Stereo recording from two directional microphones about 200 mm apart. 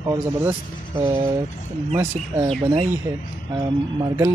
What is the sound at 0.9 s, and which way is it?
Speech, 25° right (ahead or behind).